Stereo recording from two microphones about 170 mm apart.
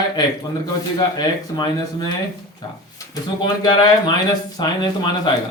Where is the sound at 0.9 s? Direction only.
25° left (ahead or behind).